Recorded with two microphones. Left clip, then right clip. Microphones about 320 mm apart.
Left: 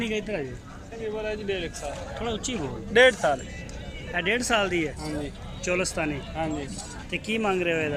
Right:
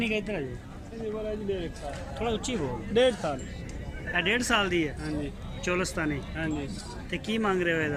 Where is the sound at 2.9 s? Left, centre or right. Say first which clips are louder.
Left 6 dB; left.